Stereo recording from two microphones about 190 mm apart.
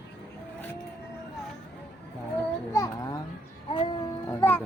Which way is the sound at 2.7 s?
15° left (ahead or behind).